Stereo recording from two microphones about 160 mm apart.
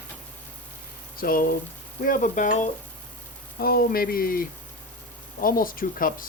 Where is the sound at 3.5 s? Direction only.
70° left (ahead or behind).